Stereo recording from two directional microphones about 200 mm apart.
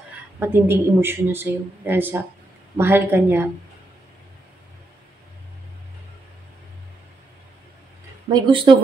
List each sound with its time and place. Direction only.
0.4 s a woman's voice: 10° right (ahead or behind)
8.3 s speech: 25° right (ahead or behind)